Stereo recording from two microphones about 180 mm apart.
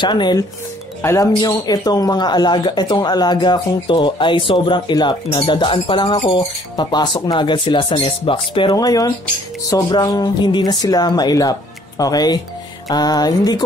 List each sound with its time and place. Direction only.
0.0 s speech: 25° left (ahead or behind)